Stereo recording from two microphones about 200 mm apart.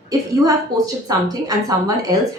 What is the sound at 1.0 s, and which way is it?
Speech, 20° right (ahead or behind).